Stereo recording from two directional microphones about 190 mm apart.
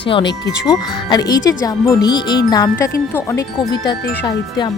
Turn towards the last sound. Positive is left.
turn(degrees=20)  # may be behind; listen again after turning